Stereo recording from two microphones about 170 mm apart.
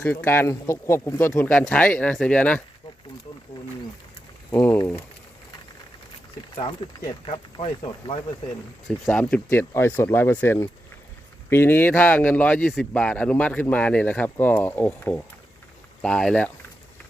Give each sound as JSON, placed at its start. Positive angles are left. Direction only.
{"t": 0.0, "sound": "speech", "side_deg": 15}
{"t": 4.5, "sound": "speech", "side_deg": 15}
{"t": 6.8, "sound": "speech", "side_deg": 30}
{"t": 9.0, "sound": "speech", "side_deg": 10}